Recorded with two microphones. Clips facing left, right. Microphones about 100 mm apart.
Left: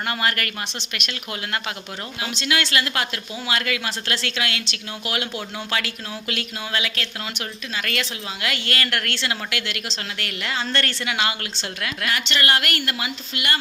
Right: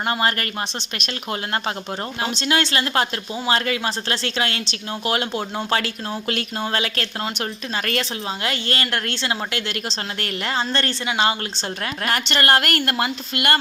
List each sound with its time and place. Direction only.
0.1 s a woman's voice: 30° right (ahead or behind)
8.4 s a woman's voice: 30° right (ahead or behind)
11.8 s a woman's voice: 40° right (ahead or behind)